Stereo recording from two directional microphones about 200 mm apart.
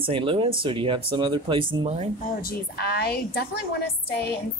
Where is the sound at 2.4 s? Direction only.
50° left (ahead or behind).